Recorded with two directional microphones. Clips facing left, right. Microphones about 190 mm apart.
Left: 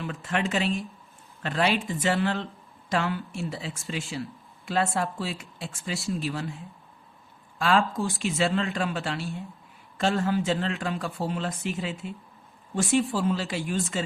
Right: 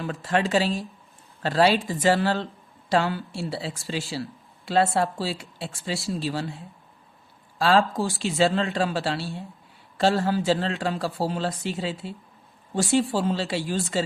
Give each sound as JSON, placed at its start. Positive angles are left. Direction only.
{"t": 0.0, "sound": "speech", "side_deg": -35}